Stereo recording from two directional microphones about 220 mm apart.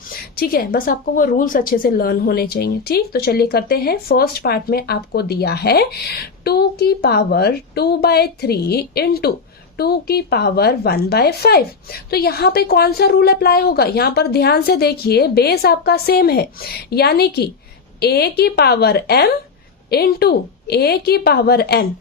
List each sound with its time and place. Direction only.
0.3 s a woman's voice: 45° left (ahead or behind)